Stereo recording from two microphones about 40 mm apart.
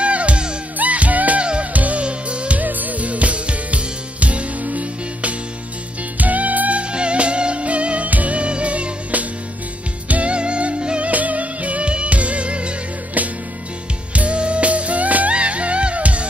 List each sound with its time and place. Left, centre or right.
0.0 s music: right
0.7 s music: right
2.6 s music: right
6.8 s music: right
10.3 s music: right
11.1 s music: right
14.1 s music: right